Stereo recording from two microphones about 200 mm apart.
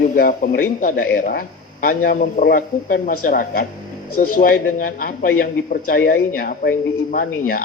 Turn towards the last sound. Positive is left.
turn(degrees=45)  # may be behind; listen again after turning